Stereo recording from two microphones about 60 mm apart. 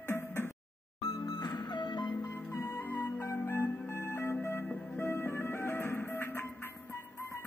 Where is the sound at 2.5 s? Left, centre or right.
Left.